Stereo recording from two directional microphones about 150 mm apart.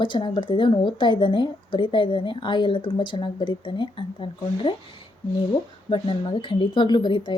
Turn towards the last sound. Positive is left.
turn(degrees=30)  # may be behind; listen again after turning